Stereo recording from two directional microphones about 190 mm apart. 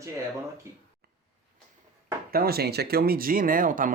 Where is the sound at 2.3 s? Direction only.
55° right (ahead or behind).